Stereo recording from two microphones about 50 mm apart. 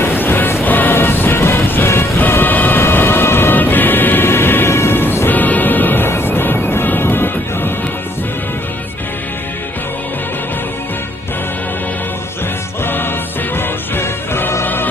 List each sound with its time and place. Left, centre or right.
0.0 s music: left
4.9 s music: left
5.3 s music: left
12.8 s music: left